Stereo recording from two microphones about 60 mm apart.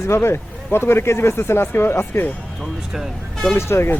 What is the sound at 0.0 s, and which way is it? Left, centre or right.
Speech, left.